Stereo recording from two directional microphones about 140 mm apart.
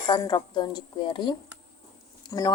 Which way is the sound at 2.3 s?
25° left (ahead or behind).